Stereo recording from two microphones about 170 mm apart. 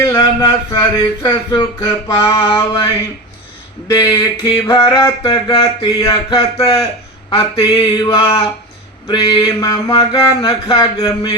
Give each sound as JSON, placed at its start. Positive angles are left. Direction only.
{"t": 0.0, "sound": "speech", "side_deg": 20}
{"t": 3.9, "sound": "speech", "side_deg": 25}